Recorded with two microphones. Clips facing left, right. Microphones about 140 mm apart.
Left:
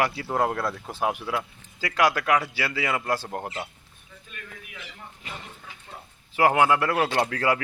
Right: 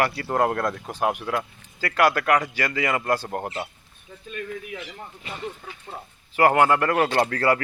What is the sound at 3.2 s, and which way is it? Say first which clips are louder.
Speech: right 3 dB; 5° right (ahead or behind).